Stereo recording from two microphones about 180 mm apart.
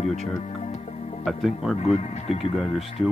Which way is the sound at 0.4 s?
35° left (ahead or behind).